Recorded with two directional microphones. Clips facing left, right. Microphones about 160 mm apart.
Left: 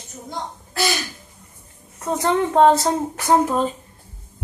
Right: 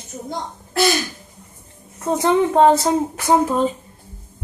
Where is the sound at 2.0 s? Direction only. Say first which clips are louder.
Right 3 dB; 20° right (ahead or behind).